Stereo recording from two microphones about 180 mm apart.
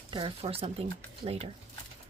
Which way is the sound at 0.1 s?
30° right (ahead or behind).